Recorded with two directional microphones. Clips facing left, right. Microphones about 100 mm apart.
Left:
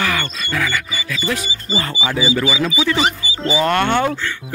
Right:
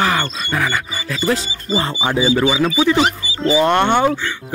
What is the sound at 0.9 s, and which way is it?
Music, 40° right (ahead or behind).